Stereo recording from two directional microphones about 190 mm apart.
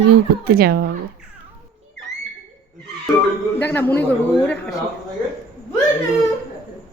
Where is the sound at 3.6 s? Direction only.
10° left (ahead or behind).